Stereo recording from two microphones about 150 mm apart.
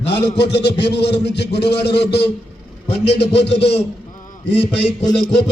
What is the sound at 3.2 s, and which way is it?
Speech, 40° left (ahead or behind).